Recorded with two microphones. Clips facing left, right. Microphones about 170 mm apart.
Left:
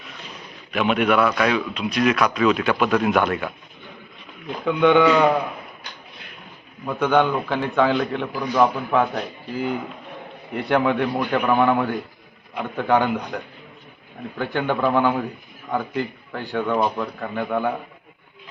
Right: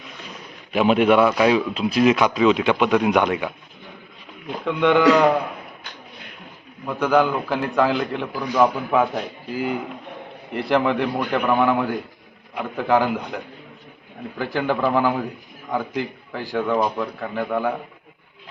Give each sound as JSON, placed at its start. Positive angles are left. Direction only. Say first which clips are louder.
{"t": 0.7, "sound": "a man's voice", "louder": "right 3 dB", "side_deg": -30}
{"t": 4.6, "sound": "a man's voice", "louder": "left 1 dB", "side_deg": 0}
{"t": 6.8, "sound": "a man's voice", "louder": "even", "side_deg": 0}